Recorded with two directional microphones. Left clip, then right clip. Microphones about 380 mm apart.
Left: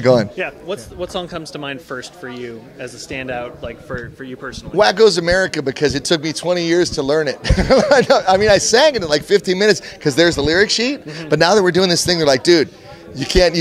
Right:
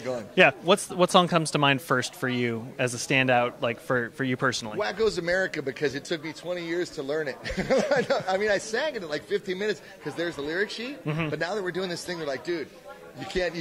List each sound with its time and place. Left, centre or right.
0.0 s speech: left
0.4 s speech: right
4.7 s speech: left
13.2 s speech: left